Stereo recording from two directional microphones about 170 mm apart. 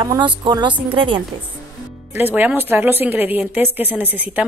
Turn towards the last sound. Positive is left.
turn(degrees=-10)  # may be behind; listen again after turning